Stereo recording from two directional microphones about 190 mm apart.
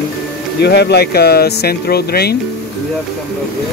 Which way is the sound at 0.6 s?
60° left (ahead or behind).